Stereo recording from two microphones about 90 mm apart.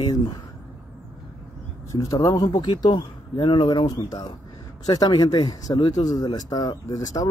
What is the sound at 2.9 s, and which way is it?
Speech, 60° left (ahead or behind).